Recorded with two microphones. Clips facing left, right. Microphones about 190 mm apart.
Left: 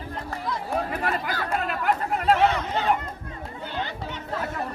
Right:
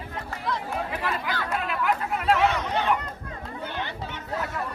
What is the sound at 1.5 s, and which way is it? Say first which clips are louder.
Chatter: left 2 dB; 45° left (ahead or behind).